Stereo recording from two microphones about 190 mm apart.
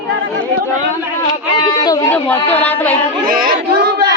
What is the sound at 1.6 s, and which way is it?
Speech, 20° left (ahead or behind).